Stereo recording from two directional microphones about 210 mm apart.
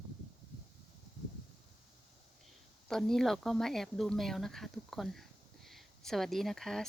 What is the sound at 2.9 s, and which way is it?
Speech, centre (ahead or behind).